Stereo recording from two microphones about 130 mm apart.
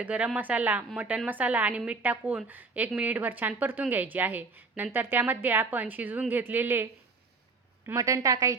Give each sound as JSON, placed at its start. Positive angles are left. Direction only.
{"t": 0.0, "sound": "a woman's voice", "side_deg": -10}
{"t": 7.9, "sound": "a woman's voice", "side_deg": -25}